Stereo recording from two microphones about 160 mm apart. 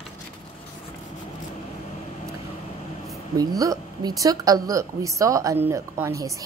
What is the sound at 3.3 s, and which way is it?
A woman's voice, 20° right (ahead or behind).